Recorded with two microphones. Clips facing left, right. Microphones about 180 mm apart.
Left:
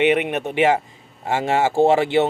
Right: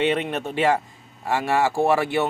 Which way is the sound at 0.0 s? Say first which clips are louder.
Left 4 dB; 15° left (ahead or behind).